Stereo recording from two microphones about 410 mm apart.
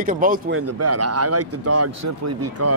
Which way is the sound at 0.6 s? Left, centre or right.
Right.